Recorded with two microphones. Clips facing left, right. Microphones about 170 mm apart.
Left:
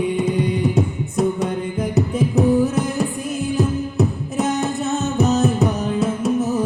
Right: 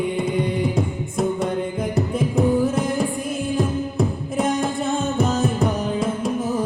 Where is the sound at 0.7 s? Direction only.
10° left (ahead or behind).